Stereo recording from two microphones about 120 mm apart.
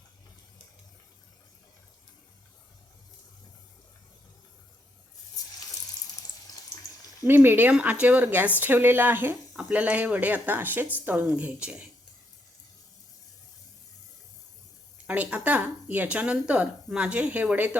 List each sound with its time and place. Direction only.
7.3 s speech: 20° right (ahead or behind)
15.0 s speech: 10° right (ahead or behind)